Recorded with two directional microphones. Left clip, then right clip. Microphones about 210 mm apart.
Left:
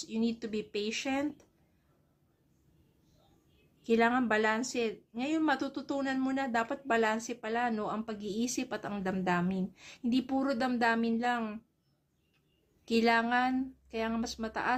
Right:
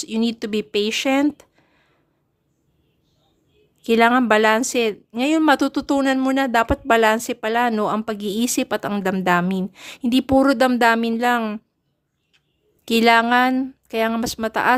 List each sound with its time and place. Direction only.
0.0 s a woman's voice: 55° right (ahead or behind)
3.8 s a woman's voice: 50° right (ahead or behind)
12.8 s a woman's voice: 55° right (ahead or behind)